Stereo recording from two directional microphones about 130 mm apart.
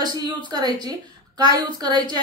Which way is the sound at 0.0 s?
30° right (ahead or behind).